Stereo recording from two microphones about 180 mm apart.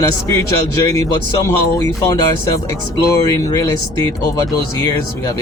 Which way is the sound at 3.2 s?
20° left (ahead or behind).